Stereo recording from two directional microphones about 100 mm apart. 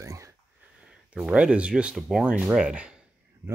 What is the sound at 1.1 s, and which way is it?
Speech, 10° right (ahead or behind).